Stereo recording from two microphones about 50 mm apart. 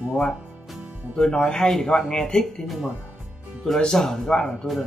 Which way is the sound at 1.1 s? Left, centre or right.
Centre.